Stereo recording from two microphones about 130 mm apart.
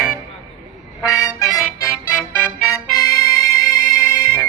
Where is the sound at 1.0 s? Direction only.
5° right (ahead or behind).